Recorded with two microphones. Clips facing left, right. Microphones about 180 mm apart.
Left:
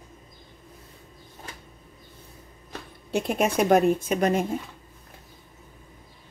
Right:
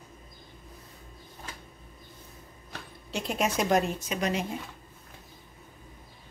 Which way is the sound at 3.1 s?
55° left (ahead or behind).